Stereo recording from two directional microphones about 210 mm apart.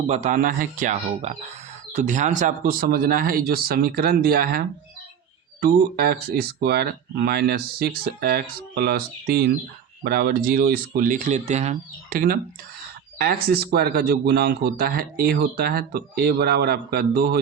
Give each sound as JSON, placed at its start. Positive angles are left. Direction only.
{"t": 0.1, "sound": "speech", "side_deg": -35}